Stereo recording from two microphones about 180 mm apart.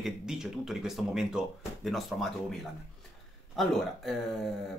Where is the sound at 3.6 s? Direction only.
Centre (ahead or behind).